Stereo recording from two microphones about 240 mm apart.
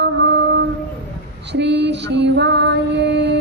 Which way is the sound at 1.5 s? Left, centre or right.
Right.